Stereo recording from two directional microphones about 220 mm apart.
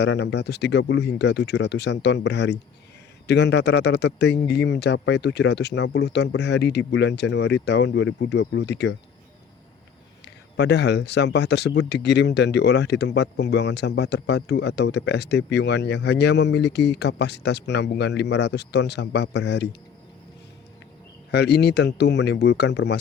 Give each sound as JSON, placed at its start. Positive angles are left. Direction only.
{"t": 0.0, "sound": "speech", "side_deg": 50}
{"t": 10.6, "sound": "speech", "side_deg": 50}
{"t": 21.3, "sound": "speech", "side_deg": 50}